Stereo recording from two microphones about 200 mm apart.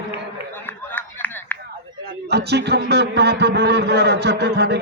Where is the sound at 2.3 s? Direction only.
55° right (ahead or behind).